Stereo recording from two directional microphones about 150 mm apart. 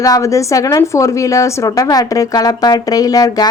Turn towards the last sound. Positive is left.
turn(degrees=25)  # may be behind; listen again after turning